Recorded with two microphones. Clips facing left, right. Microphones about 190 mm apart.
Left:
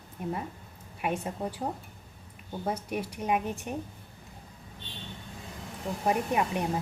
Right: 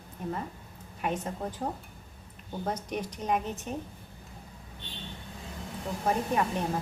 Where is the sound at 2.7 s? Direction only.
10° left (ahead or behind).